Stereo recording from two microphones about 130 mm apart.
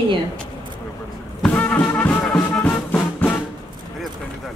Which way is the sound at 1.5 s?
10° left (ahead or behind).